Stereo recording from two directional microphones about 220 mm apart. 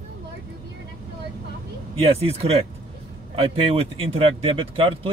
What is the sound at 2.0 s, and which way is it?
Speech, 25° right (ahead or behind).